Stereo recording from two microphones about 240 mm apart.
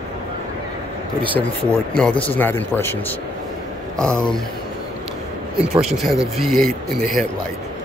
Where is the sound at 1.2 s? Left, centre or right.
Right.